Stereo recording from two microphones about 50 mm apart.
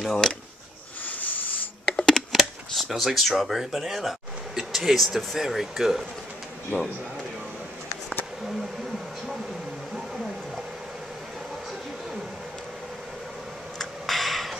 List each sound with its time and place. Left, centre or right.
0.0 s speech: centre
1.0 s wheeze: left
1.9 s computer keyboard: centre
2.3 s speech: centre
8.5 s bee: centre
9.9 s whale vocalization: centre
13.7 s a sound: centre